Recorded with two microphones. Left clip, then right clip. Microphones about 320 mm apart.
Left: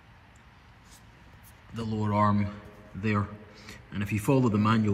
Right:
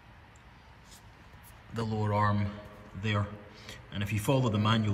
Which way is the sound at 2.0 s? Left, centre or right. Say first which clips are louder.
Left 4 dB; centre.